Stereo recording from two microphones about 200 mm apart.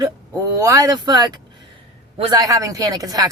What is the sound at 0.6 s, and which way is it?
Speech, 15° right (ahead or behind).